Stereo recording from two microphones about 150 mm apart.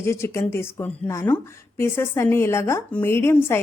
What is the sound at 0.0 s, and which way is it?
A woman's voice, 15° left (ahead or behind).